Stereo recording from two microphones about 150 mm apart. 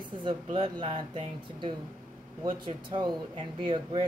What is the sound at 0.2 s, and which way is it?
Speech, 30° right (ahead or behind).